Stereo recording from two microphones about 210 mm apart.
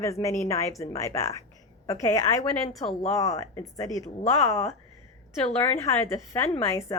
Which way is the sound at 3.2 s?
15° left (ahead or behind).